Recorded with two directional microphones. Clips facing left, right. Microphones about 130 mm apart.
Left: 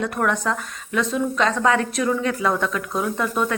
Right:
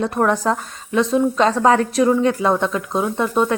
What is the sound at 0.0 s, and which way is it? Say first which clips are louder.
Speech: right 4 dB; 35° right (ahead or behind).